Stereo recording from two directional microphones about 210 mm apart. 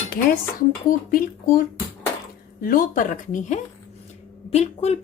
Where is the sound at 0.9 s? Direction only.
40° left (ahead or behind).